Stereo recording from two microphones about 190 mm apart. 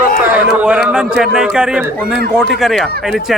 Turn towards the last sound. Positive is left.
turn(degrees=0)  # may be behind; listen again after turning